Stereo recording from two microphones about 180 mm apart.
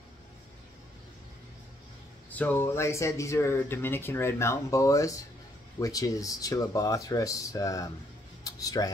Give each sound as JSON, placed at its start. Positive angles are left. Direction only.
{"t": 2.3, "sound": "speech", "side_deg": 10}